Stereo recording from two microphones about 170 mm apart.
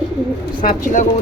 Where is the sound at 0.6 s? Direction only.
55° left (ahead or behind).